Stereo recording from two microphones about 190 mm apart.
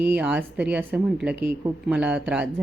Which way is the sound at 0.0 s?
10° right (ahead or behind).